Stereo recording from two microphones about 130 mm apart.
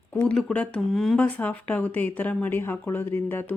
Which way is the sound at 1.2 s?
10° left (ahead or behind).